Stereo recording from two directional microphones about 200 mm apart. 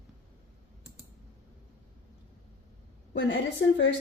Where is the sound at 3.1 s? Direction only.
65° left (ahead or behind).